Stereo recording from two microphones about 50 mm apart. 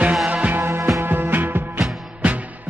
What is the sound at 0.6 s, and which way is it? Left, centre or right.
Music, right.